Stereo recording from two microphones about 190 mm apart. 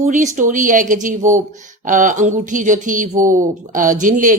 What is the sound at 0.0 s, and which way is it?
Speech, 40° right (ahead or behind).